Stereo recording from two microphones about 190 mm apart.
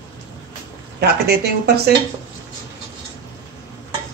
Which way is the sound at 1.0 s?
60° right (ahead or behind).